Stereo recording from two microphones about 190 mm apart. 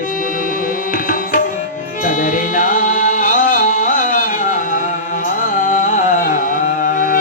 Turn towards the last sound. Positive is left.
turn(degrees=45)  # may be behind; listen again after turning